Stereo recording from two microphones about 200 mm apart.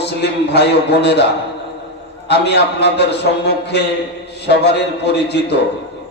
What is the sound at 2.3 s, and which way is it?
A man's voice, 60° left (ahead or behind).